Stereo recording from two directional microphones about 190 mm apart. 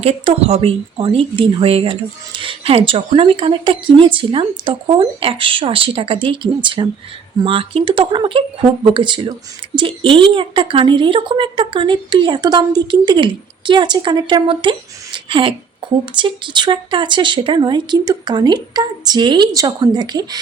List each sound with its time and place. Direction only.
0.0 s speech: 35° right (ahead or behind)